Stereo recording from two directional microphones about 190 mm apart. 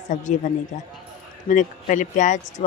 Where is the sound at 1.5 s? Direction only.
40° left (ahead or behind).